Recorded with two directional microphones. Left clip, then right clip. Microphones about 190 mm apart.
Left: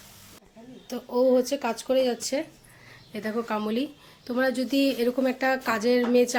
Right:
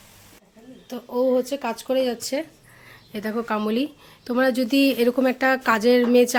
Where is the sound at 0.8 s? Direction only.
10° right (ahead or behind).